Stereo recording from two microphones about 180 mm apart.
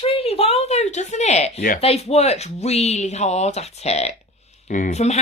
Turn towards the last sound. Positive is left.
turn(degrees=40)  # may be behind; listen again after turning